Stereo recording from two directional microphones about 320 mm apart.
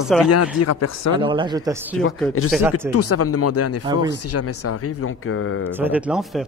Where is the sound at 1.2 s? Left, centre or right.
Centre.